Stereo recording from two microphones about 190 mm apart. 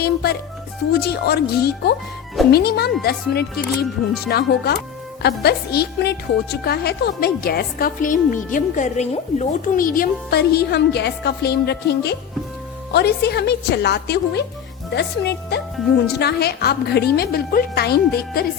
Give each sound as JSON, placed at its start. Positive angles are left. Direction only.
{"t": 0.0, "sound": "a woman's voice", "side_deg": 55}